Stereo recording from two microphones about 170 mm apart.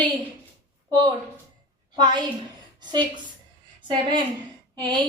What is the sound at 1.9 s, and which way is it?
Speech, 25° right (ahead or behind).